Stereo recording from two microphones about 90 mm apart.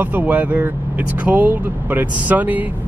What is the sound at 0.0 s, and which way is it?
Speech, 20° right (ahead or behind).